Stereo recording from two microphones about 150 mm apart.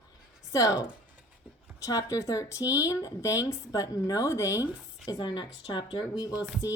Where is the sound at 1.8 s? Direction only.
20° left (ahead or behind).